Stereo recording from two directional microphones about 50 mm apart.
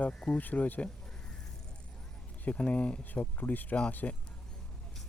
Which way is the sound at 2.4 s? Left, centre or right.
Left.